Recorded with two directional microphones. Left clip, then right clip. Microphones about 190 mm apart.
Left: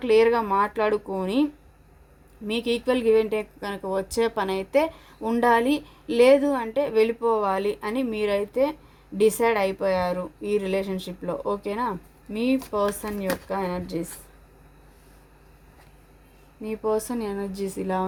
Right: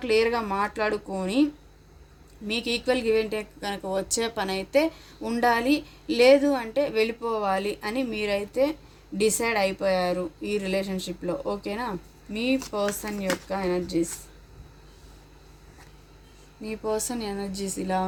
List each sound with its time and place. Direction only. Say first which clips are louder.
0.0 s a woman's voice: left 4 dB; 50° left (ahead or behind)
2.5 s a woman's voice: left 1 dB; 45° left (ahead or behind)
16.6 s a woman's voice: left 3 dB; 50° left (ahead or behind)